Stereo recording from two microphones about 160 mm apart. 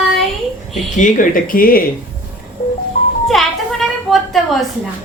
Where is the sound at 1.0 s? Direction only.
60° left (ahead or behind).